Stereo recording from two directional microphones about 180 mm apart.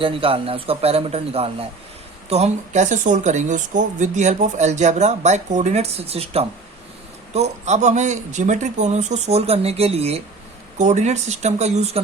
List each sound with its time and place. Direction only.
0.0 s speech: 30° right (ahead or behind)